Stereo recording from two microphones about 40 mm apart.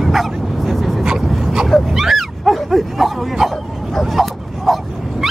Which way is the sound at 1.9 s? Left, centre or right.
Centre.